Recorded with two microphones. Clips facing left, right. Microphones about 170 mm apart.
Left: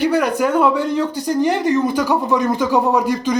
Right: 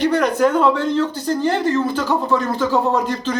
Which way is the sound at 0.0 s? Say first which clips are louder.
Right 1 dB; 10° left (ahead or behind).